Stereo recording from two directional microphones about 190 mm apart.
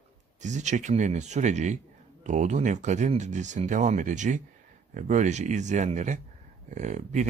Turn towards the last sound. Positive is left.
turn(degrees=-40)  # may be behind; listen again after turning